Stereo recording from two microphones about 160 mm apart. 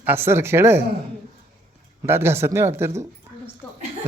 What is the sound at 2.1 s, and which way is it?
Speech, 15° right (ahead or behind).